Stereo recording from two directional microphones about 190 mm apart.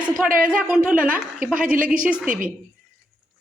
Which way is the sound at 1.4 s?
45° right (ahead or behind).